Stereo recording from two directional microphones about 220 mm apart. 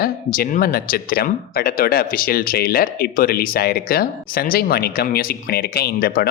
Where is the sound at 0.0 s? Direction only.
40° left (ahead or behind).